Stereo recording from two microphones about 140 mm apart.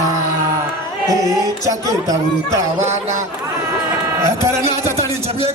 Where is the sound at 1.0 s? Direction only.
25° right (ahead or behind).